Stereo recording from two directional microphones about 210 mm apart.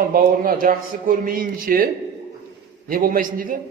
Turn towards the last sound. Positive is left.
turn(degrees=-40)  # may be behind; listen again after turning